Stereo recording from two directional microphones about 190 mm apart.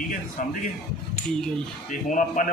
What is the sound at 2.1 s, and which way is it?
Speech, 40° left (ahead or behind).